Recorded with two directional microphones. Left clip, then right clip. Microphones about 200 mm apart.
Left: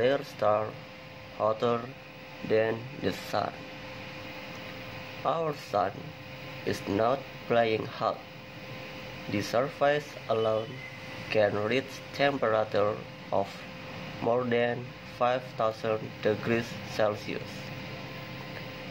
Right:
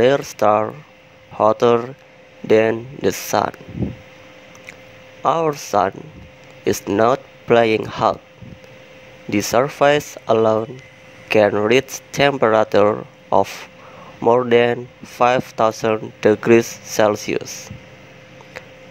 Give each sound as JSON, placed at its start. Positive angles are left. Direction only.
{"t": 0.0, "sound": "speech", "side_deg": -45}
{"t": 5.2, "sound": "speech", "side_deg": -45}
{"t": 9.3, "sound": "speech", "side_deg": -45}